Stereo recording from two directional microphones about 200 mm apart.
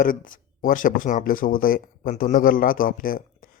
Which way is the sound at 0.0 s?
45° left (ahead or behind).